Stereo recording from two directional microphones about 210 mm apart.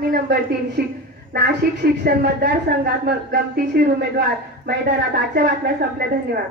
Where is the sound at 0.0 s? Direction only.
45° right (ahead or behind).